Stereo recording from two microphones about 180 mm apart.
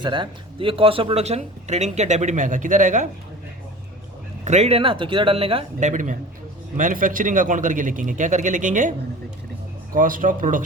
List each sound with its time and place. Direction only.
0.0 s speech: 25° right (ahead or behind); by 3.1 s 45° right (ahead or behind)
4.4 s a man's voice: 35° right (ahead or behind)